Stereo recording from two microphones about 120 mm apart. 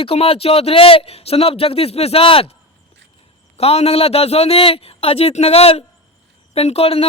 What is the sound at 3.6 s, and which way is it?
A man's voice, 60° left (ahead or behind).